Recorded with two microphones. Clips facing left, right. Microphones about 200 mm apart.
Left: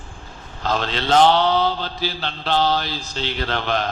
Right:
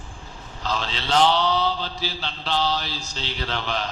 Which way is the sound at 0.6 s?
55° left (ahead or behind).